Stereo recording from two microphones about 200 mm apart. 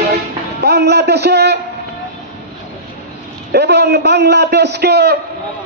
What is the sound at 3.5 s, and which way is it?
A man's voice, 55° right (ahead or behind).